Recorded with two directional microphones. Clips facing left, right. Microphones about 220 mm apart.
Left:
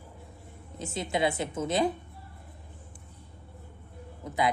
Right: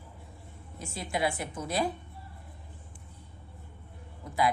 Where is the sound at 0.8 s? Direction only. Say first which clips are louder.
Left 3 dB; 20° left (ahead or behind).